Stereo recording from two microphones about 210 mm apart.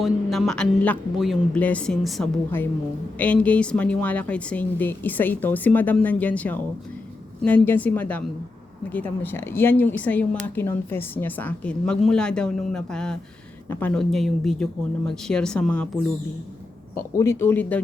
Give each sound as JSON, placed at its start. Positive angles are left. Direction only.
{"t": 0.0, "sound": "speech", "side_deg": 0}
{"t": 17.2, "sound": "speech", "side_deg": 10}